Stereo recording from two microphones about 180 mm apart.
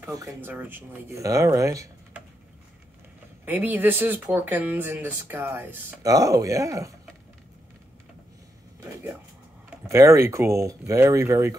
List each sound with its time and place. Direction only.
0.0 s speech: 20° right (ahead or behind)
3.4 s speech: 10° right (ahead or behind)
9.8 s speech: 15° right (ahead or behind)